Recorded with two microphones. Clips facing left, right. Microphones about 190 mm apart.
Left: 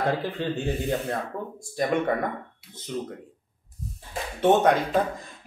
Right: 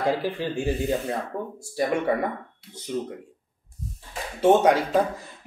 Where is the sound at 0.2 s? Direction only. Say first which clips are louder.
Right 1 dB; 10° right (ahead or behind).